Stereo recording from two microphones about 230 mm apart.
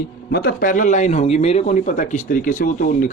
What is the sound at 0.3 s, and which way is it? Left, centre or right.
Speech, left.